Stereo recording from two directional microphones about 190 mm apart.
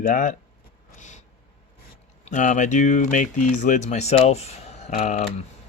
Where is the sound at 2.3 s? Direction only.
40° left (ahead or behind).